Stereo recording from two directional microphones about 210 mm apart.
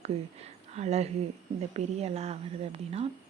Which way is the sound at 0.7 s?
30° right (ahead or behind).